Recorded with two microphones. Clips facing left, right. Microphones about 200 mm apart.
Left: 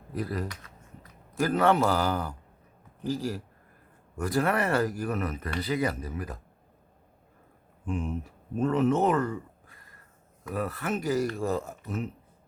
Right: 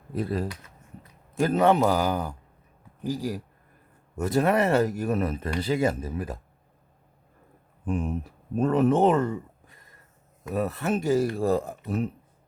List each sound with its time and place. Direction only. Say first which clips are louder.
0.1 s a man's voice: right 4 dB; 25° right (ahead or behind)
7.9 s speech: right 3 dB; 35° right (ahead or behind)